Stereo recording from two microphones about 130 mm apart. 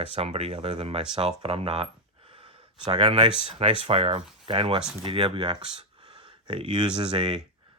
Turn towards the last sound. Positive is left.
turn(degrees=-35)  # may be behind; listen again after turning